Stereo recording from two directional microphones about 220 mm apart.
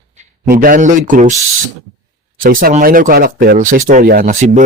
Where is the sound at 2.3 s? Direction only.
40° right (ahead or behind).